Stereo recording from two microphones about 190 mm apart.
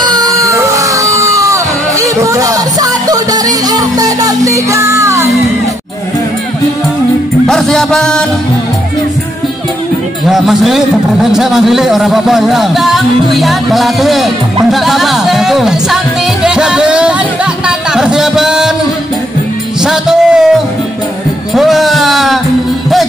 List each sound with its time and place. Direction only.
0.0 s music: 20° right (ahead or behind)
7.4 s music: centre (ahead or behind)
10.2 s a man's voice: centre (ahead or behind)
16.4 s music: 5° right (ahead or behind)
17.6 s a sound: 5° right (ahead or behind)
19.8 s music: 5° right (ahead or behind)
21.5 s music: centre (ahead or behind)